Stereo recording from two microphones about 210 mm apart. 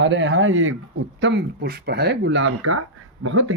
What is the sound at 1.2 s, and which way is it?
Speech, 55° right (ahead or behind).